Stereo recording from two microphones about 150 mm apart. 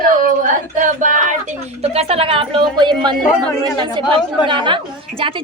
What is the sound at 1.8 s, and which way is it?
A woman's voice, 40° right (ahead or behind).